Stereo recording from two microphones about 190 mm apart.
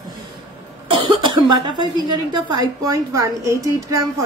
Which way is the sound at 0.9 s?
25° right (ahead or behind).